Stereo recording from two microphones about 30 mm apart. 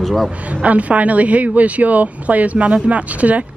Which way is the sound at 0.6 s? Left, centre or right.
Right.